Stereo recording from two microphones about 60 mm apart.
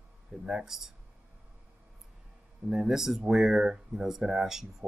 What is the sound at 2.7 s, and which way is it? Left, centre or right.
Speech, centre.